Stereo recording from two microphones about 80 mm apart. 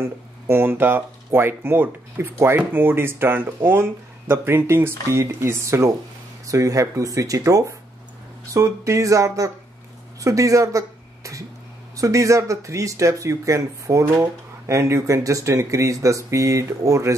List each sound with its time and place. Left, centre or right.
0.0 s speech: right